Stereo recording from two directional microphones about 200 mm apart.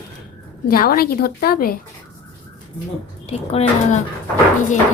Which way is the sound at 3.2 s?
30° left (ahead or behind).